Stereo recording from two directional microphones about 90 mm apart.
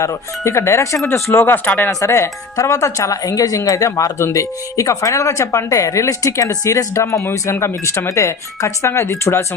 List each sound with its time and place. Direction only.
0.0 s speech: 35° left (ahead or behind)
1.9 s speech: 35° left (ahead or behind)